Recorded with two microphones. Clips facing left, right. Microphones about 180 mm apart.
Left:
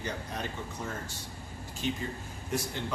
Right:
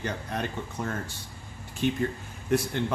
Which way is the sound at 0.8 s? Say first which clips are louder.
Right 8 dB; 70° right (ahead or behind).